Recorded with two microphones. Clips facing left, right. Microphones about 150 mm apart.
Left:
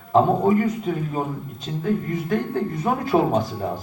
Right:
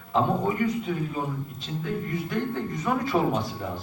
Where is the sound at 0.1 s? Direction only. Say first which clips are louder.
Left 7 dB; 45° left (ahead or behind).